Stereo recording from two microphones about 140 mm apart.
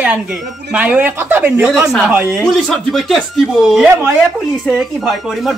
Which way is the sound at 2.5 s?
Centre (ahead or behind).